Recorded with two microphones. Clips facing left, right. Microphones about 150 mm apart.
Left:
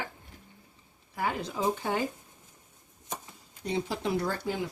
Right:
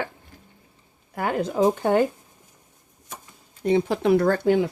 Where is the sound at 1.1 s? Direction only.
55° right (ahead or behind).